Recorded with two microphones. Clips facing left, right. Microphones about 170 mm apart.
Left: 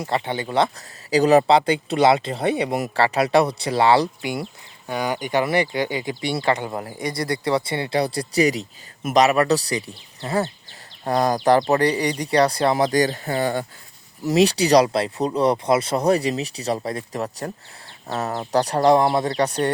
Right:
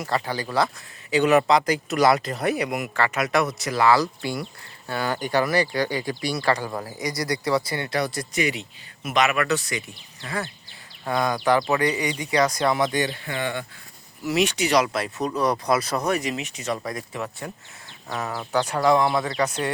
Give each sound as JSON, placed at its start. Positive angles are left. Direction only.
{"t": 0.0, "sound": "speech", "side_deg": 25}
{"t": 1.1, "sound": "speech", "side_deg": 35}
{"t": 11.0, "sound": "speech", "side_deg": 35}